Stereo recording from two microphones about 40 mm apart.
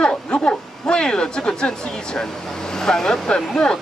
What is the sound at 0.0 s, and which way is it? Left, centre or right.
Speech, left.